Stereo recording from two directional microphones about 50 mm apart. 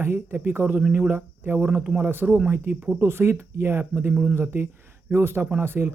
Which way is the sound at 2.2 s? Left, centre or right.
Right.